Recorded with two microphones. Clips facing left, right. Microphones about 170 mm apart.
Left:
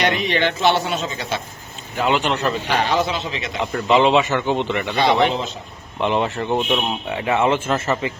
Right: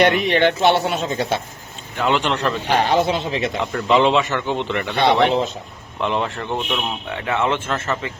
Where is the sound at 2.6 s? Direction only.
50° right (ahead or behind).